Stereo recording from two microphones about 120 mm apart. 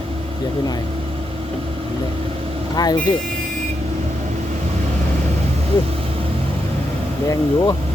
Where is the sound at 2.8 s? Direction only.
35° left (ahead or behind).